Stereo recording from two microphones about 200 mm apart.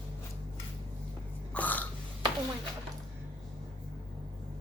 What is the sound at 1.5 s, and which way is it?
Burping, 10° left (ahead or behind).